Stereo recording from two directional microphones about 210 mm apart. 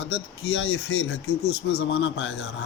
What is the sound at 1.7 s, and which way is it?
Speech, 55° left (ahead or behind).